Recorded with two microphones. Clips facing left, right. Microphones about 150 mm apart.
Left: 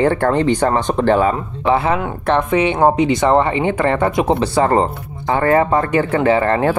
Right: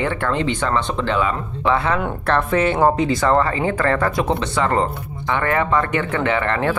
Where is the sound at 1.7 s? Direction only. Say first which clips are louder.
Left 4 dB; 25° left (ahead or behind).